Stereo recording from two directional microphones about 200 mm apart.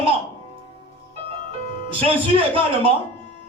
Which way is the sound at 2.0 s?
25° right (ahead or behind).